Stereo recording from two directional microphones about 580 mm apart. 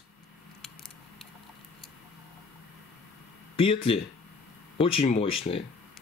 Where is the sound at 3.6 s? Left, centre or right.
Centre.